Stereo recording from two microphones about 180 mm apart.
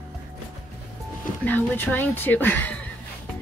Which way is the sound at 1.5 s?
10° left (ahead or behind).